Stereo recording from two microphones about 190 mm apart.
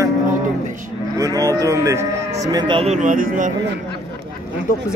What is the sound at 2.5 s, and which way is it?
Speech, 30° right (ahead or behind).